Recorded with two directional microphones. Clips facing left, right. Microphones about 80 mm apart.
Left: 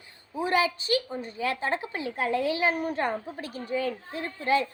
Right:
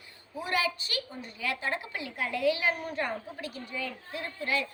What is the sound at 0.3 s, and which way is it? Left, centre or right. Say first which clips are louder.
A child's voice: left 5 dB; left.